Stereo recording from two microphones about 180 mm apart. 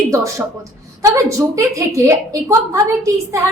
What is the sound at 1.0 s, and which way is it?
A woman's voice, 15° right (ahead or behind).